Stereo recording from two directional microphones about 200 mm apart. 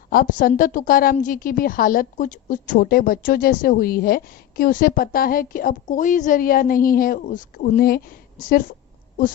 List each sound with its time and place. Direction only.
0.1 s a woman's voice: 45° left (ahead or behind)